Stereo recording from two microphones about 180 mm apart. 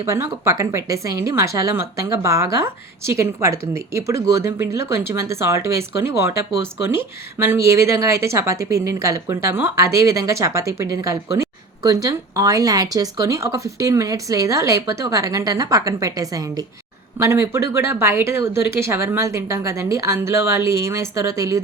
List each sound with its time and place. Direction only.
0.0 s speech: 15° right (ahead or behind)